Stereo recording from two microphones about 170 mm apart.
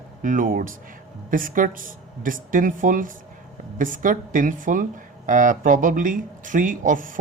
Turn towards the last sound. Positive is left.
turn(degrees=-50)  # may be behind; listen again after turning